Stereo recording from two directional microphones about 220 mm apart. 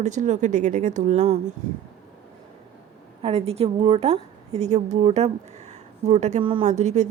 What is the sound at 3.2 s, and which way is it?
A woman's voice, 25° right (ahead or behind).